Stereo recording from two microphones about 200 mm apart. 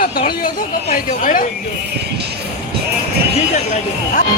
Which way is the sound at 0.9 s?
40° left (ahead or behind).